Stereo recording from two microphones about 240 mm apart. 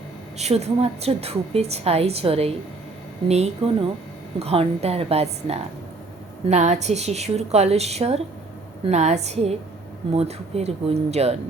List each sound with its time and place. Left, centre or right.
0.3 s a woman's voice: right